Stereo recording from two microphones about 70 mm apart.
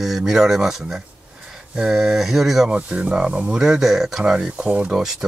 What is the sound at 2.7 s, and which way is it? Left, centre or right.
Speech, centre.